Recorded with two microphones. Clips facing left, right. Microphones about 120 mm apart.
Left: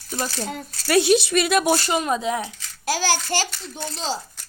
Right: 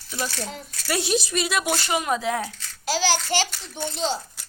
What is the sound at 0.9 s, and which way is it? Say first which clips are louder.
Speech: left 7 dB; 65° left (ahead or behind).